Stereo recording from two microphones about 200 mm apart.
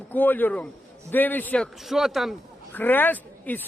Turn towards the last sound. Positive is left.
turn(degrees=10)  # may be behind; listen again after turning